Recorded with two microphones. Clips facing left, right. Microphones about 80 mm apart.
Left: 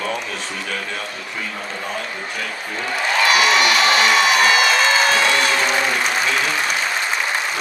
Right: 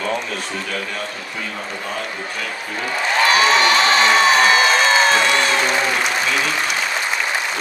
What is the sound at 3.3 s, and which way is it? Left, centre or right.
Crowd, right.